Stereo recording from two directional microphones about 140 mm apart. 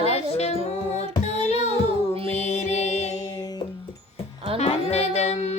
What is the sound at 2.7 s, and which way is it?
Music, 50° left (ahead or behind).